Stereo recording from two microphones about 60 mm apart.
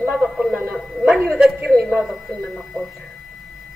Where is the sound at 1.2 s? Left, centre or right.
Centre.